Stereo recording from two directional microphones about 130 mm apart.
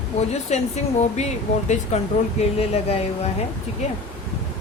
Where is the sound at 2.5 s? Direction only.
50° left (ahead or behind).